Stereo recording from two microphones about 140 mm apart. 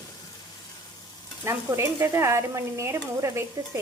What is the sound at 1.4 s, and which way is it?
Stir, 20° right (ahead or behind).